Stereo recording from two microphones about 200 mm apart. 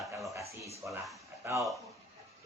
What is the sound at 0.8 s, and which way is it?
Speech, centre (ahead or behind).